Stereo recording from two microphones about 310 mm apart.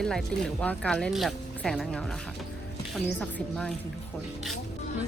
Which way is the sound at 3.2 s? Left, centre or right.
Centre.